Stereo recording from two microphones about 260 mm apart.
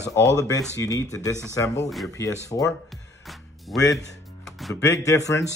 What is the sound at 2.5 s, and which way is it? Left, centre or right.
Speech, centre.